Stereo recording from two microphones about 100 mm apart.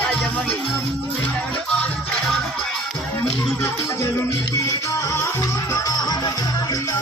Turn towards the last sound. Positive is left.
turn(degrees=40)  # may be behind; listen again after turning